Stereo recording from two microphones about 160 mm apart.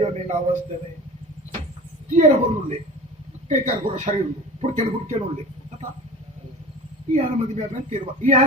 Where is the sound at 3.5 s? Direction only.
50° right (ahead or behind).